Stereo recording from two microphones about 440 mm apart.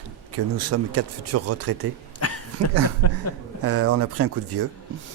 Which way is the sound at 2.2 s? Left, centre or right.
Left.